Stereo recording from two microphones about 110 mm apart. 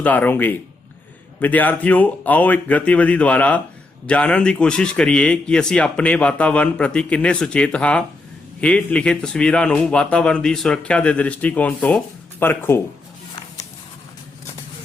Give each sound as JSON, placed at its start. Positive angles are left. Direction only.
{"t": 0.0, "sound": "a man's voice", "side_deg": 15}